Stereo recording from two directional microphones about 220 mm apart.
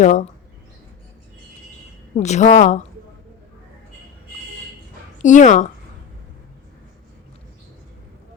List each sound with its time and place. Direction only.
0.0 s a woman's voice: 35° left (ahead or behind)
2.1 s a woman's voice: 30° left (ahead or behind)
5.2 s a woman's voice: 35° left (ahead or behind)